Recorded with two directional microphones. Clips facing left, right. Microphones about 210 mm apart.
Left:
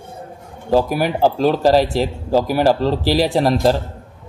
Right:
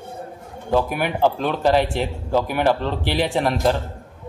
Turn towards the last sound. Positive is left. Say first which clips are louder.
# left 4 dB
turn(degrees=35)  # may be behind; listen again after turning